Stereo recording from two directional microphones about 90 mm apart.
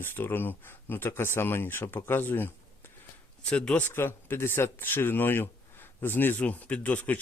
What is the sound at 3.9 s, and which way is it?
Speech, 25° left (ahead or behind).